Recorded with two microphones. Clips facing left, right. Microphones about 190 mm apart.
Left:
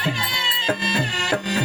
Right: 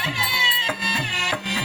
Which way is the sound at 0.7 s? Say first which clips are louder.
Left 7 dB; 45° left (ahead or behind).